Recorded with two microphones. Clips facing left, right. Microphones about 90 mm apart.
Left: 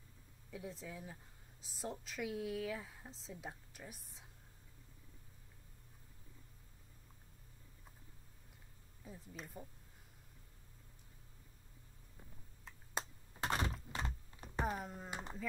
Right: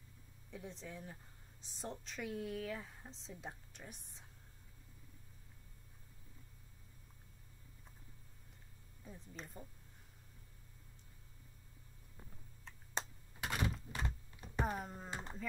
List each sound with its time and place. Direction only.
0.5 s speech: 5° left (ahead or behind)
9.0 s speech: 5° left (ahead or behind)
13.4 s thunk: 35° left (ahead or behind)
14.6 s speech: centre (ahead or behind)